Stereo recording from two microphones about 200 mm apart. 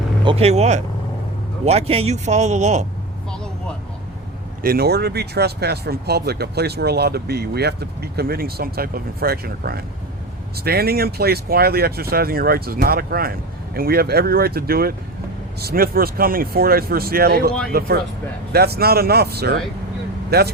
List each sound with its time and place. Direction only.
0.3 s a man's voice: 30° right (ahead or behind)
4.6 s speech: 50° right (ahead or behind)